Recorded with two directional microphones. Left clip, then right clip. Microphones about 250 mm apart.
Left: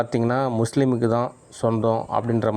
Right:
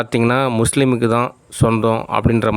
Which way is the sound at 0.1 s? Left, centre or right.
Right.